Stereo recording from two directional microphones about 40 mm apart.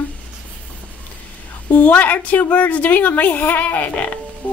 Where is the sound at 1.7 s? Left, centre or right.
Left.